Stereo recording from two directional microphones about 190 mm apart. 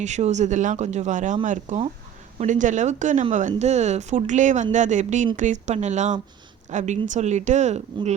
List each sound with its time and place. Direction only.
0.0 s speech: 40° right (ahead or behind)